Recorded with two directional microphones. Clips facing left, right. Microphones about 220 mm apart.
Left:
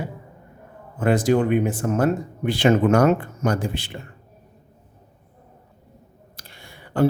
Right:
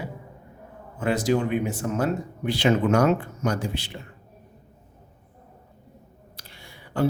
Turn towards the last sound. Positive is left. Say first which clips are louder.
# left 5 dB
turn(degrees=50)  # may be behind; listen again after turning